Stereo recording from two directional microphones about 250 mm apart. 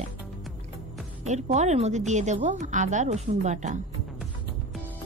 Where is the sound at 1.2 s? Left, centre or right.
Right.